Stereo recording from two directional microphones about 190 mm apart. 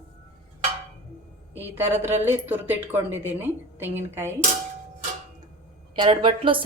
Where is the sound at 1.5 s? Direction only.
10° right (ahead or behind).